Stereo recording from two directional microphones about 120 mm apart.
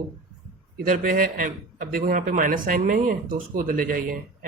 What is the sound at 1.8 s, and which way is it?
A man's voice, 90° right.